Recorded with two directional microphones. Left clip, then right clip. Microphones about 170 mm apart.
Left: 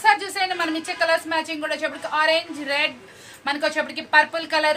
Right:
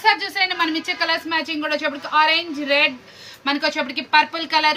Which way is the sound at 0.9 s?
45° left (ahead or behind).